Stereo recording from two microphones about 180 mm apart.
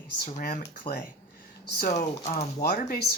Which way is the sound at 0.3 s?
40° left (ahead or behind).